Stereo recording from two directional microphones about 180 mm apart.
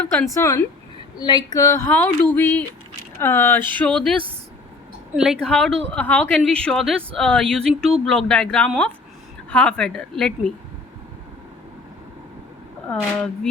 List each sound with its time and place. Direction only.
0.0 s a woman's voice: 10° left (ahead or behind)